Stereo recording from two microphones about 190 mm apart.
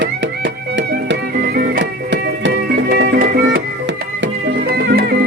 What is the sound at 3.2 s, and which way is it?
Music, 55° right (ahead or behind).